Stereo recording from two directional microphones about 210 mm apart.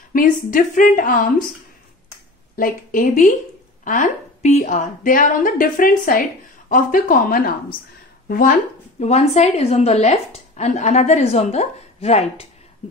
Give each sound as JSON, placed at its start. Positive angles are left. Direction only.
{"t": 0.1, "sound": "a woman's voice", "side_deg": 40}
{"t": 2.5, "sound": "a woman's voice", "side_deg": 40}